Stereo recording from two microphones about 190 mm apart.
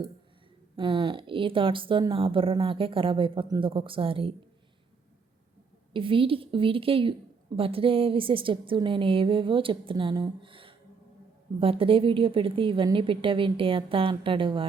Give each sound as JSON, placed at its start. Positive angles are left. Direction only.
{"t": 0.8, "sound": "a woman's voice", "side_deg": -25}
{"t": 5.9, "sound": "a woman's voice", "side_deg": -25}